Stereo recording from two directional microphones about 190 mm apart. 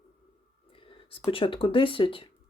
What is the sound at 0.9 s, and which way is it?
Speech, 30° left (ahead or behind).